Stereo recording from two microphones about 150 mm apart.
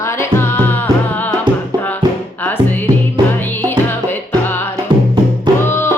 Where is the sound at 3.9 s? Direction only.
15° left (ahead or behind).